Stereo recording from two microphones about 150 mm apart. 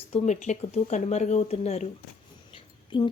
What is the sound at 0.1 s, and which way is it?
Speech, 50° left (ahead or behind).